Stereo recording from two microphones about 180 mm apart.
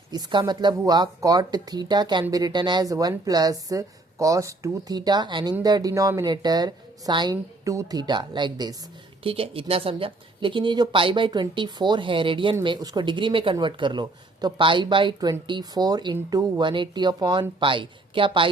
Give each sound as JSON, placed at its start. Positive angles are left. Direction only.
{"t": 0.1, "sound": "speech", "side_deg": -25}